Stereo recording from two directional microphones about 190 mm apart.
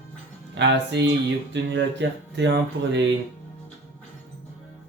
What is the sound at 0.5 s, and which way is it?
Speech, 65° right (ahead or behind).